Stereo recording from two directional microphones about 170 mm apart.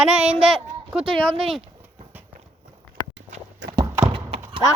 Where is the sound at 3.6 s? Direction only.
90° right.